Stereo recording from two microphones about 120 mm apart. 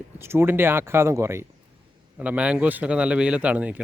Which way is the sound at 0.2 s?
20° right (ahead or behind).